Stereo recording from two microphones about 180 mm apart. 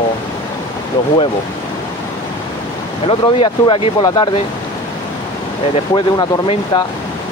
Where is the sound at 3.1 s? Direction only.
30° left (ahead or behind).